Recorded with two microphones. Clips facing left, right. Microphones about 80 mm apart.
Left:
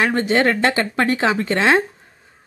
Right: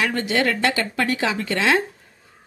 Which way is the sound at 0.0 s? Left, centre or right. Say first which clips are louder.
Left 4 dB; left.